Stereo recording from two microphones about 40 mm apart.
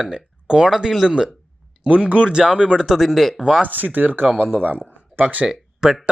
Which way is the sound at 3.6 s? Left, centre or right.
Right.